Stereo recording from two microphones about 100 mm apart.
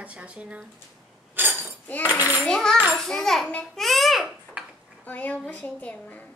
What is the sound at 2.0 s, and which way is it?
Speech, 15° right (ahead or behind).